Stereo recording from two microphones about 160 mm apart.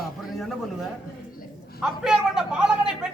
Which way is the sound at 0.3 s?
Centre (ahead or behind).